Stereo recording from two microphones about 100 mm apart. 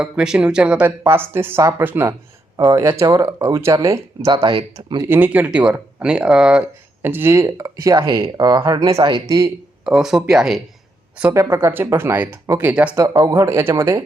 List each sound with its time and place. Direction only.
0.0 s speech: 10° right (ahead or behind); by 4.3 s 30° right (ahead or behind)
4.4 s speech: 60° right (ahead or behind)
5.0 s speech: 20° right (ahead or behind)
7.0 s speech: 20° right (ahead or behind); by 9.5 s 40° right (ahead or behind)
9.8 s speech: 5° right (ahead or behind)
11.3 s speech: 30° right (ahead or behind); by 13.0 s 15° right (ahead or behind)
13.0 s speech: 35° right (ahead or behind)